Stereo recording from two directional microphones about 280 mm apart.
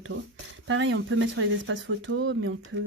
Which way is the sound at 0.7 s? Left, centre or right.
Right.